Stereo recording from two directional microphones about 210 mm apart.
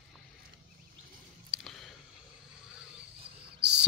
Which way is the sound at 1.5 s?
Centre (ahead or behind).